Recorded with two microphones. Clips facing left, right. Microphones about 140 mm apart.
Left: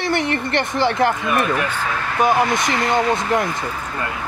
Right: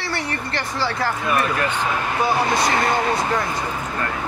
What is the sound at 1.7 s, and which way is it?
Speech, 15° right (ahead or behind).